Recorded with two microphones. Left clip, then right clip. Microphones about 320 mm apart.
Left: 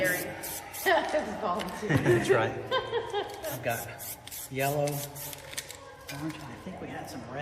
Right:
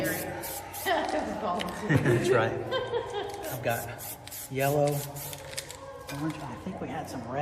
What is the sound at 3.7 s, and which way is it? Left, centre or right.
A man's voice, centre.